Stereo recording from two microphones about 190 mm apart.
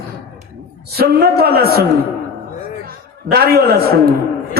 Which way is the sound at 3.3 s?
55° right (ahead or behind).